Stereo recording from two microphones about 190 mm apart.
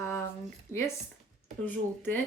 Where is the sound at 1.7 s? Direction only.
10° left (ahead or behind).